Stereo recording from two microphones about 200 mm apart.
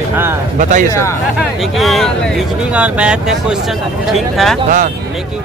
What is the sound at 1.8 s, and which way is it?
Speech, centre (ahead or behind).